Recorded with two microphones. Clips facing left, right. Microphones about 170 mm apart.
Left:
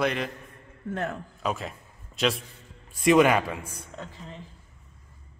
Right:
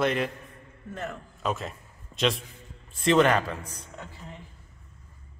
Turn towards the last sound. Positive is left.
turn(degrees=10)  # may be behind; listen again after turning